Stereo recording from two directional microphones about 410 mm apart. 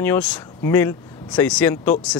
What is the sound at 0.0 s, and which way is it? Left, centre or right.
Speech, centre.